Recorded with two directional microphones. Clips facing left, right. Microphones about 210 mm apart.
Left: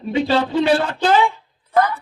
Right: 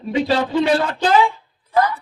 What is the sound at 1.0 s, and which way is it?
Speech, 35° left (ahead or behind).